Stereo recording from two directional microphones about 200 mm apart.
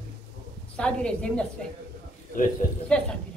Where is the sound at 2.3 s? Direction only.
40° left (ahead or behind).